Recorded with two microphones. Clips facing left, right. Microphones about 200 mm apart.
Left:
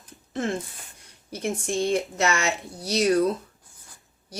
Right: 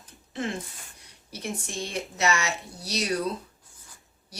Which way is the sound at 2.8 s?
50° left (ahead or behind).